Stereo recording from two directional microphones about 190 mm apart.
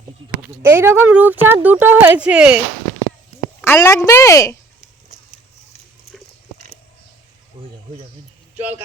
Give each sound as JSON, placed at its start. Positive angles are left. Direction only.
{"t": 0.6, "sound": "speech", "side_deg": -10}
{"t": 3.6, "sound": "a woman's voice", "side_deg": 15}
{"t": 8.5, "sound": "speech", "side_deg": -10}